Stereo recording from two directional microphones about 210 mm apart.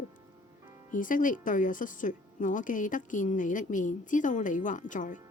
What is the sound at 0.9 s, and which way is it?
Speech, 40° left (ahead or behind).